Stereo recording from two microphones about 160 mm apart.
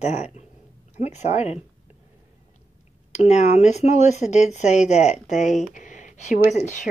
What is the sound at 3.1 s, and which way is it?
Speech, 45° left (ahead or behind).